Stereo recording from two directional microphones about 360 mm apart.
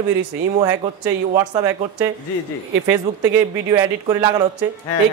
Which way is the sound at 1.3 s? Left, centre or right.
Centre.